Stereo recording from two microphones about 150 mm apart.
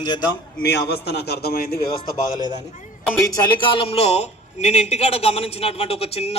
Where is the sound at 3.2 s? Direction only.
25° left (ahead or behind).